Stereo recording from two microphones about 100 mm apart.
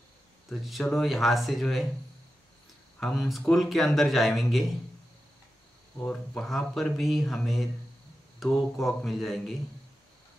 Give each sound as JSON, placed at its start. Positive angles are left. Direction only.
{"t": 0.5, "sound": "speech", "side_deg": 0}
{"t": 3.0, "sound": "speech", "side_deg": 0}
{"t": 5.9, "sound": "speech", "side_deg": 10}
{"t": 8.4, "sound": "mantra", "side_deg": 0}
{"t": 8.8, "sound": "speech", "side_deg": 0}